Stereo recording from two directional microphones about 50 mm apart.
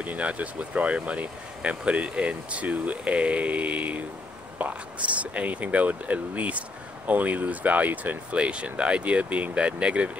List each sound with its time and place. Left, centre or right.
0.0 s speech: right